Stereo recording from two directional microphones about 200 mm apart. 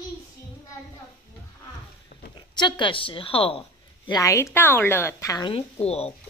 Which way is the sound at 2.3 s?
20° left (ahead or behind).